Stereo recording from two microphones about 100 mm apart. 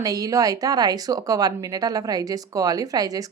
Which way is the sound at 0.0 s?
40° right (ahead or behind).